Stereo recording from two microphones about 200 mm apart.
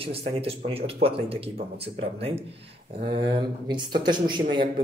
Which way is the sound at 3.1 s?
25° right (ahead or behind).